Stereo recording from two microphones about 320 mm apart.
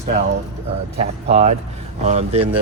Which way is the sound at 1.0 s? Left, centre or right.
Right.